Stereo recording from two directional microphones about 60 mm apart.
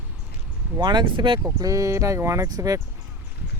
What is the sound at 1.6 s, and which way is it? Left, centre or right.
Speech, right.